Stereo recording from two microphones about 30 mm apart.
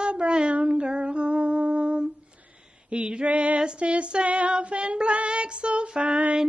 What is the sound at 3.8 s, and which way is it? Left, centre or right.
Child singing, right.